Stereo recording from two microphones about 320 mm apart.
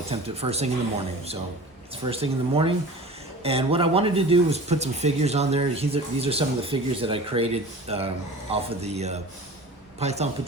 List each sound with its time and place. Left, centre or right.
0.1 s speech: centre
2.0 s speech: centre